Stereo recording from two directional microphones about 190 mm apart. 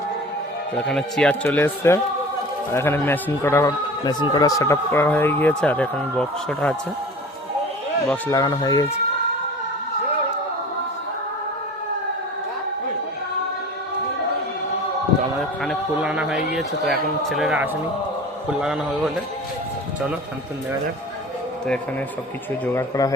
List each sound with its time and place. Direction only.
0.8 s a man's voice: 5° left (ahead or behind)
8.1 s speech: 20° left (ahead or behind)
15.4 s a man's voice: centre (ahead or behind)
22.6 s a man's voice: 15° left (ahead or behind)